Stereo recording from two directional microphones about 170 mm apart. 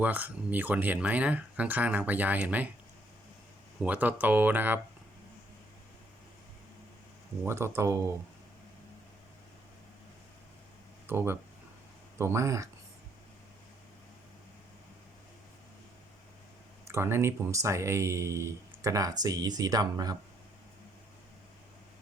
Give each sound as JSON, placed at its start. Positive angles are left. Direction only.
{"t": 0.0, "sound": "speech", "side_deg": -10}
{"t": 3.8, "sound": "speech", "side_deg": -10}
{"t": 7.4, "sound": "speech", "side_deg": -15}
{"t": 11.0, "sound": "speech", "side_deg": -15}
{"t": 16.8, "sound": "speech", "side_deg": -15}